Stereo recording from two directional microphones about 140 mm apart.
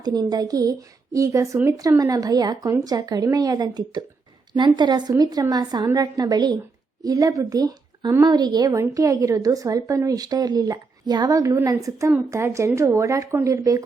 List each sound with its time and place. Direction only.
0.0 s a woman's voice: 30° right (ahead or behind)